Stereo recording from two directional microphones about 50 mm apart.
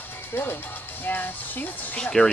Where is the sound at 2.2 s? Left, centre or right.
Centre.